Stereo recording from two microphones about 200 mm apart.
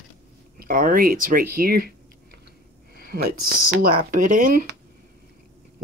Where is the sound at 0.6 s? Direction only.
45° right (ahead or behind).